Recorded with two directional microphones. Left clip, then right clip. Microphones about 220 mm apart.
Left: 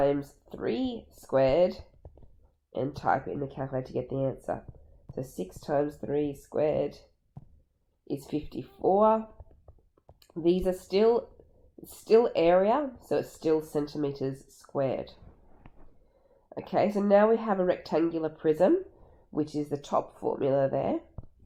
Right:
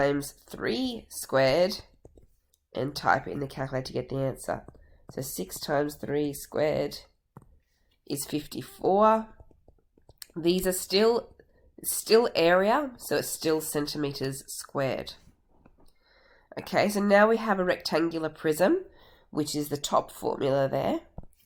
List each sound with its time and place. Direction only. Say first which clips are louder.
0.0 s speech: even; 20° right (ahead or behind)
8.0 s speech: right 1 dB; 20° right (ahead or behind)
10.4 s speech: even; 20° right (ahead or behind)
16.5 s speech: right 1 dB; 20° right (ahead or behind)